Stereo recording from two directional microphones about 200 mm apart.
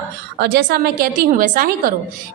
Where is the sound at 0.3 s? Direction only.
55° right (ahead or behind).